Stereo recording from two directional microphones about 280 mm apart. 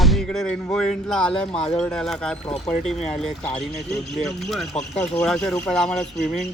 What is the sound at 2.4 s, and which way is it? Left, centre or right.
Speech, left.